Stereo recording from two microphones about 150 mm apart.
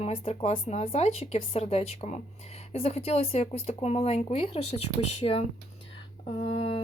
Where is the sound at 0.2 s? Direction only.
40° left (ahead or behind).